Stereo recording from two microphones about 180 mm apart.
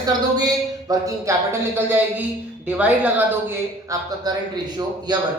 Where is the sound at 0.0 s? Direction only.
20° right (ahead or behind).